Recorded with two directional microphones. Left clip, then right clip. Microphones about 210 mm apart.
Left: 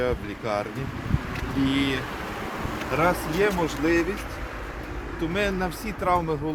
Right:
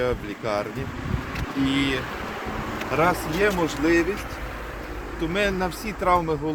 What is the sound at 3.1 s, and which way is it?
Speech, 10° left (ahead or behind).